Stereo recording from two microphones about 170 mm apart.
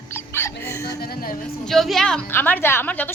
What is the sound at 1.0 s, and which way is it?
Speech, 60° left (ahead or behind).